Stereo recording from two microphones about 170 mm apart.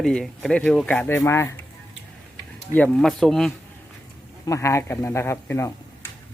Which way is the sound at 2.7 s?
10° left (ahead or behind).